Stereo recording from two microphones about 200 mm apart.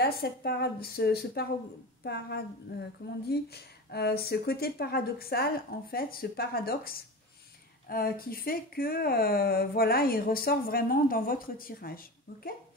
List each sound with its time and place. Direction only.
0.0 s speech: 50° left (ahead or behind)